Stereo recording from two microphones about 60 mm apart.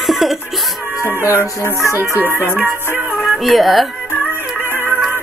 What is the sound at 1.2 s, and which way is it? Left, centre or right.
Music, right.